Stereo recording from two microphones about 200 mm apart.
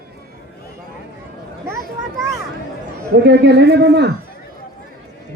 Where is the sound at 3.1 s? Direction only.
55° right (ahead or behind).